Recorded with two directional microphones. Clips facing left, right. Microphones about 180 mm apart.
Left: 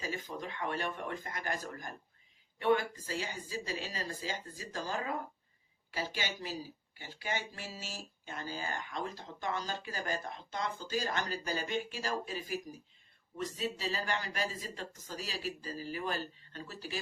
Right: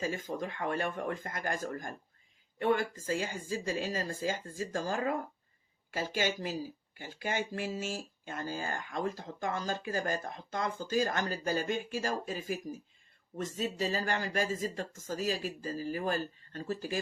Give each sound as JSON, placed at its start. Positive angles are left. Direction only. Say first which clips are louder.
{"t": 0.1, "sound": "speech", "louder": "right 4 dB", "side_deg": -45}